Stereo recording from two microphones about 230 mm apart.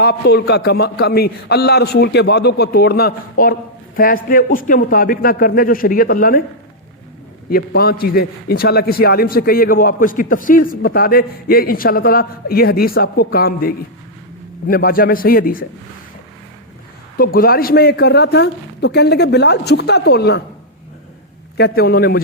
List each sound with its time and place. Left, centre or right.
0.0 s a man's voice: left
7.5 s a man's voice: left
17.2 s speech: left
21.6 s a man's voice: left